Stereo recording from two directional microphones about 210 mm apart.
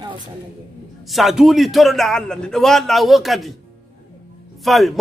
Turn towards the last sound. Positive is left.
turn(degrees=0)  # may be behind; listen again after turning